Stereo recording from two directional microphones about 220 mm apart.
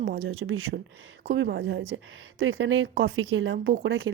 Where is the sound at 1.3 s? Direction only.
50° right (ahead or behind).